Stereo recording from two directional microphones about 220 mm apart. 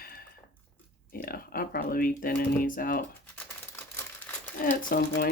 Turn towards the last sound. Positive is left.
turn(degrees=45)  # may be behind; listen again after turning